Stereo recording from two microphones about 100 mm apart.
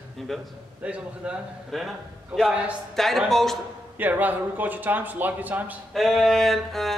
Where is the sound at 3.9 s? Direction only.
15° right (ahead or behind).